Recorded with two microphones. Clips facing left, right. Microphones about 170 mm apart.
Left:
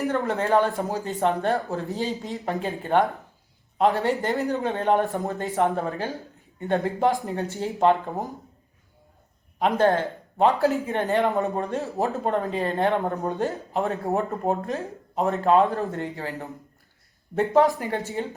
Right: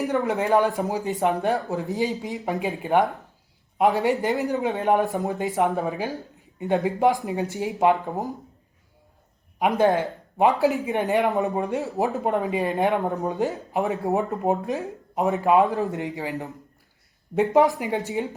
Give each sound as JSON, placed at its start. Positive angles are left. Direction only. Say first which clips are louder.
{"t": 0.0, "sound": "speech", "louder": "right 1 dB", "side_deg": -15}
{"t": 9.6, "sound": "speech", "louder": "right 1 dB", "side_deg": -10}